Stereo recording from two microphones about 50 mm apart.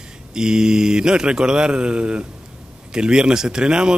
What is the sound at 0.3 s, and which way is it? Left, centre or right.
Speech, centre.